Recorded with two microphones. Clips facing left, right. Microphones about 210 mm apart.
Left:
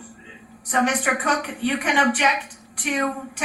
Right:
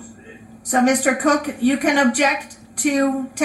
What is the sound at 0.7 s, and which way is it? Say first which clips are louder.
A woman's voice: right 6 dB; 40° right (ahead or behind).